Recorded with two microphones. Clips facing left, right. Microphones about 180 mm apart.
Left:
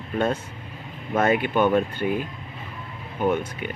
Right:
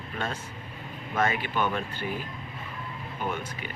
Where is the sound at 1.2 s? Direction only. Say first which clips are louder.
Left 11 dB; 55° left (ahead or behind).